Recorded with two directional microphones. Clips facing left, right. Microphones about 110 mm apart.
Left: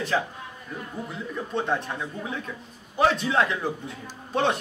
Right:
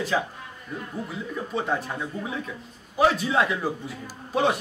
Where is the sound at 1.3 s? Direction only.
5° right (ahead or behind).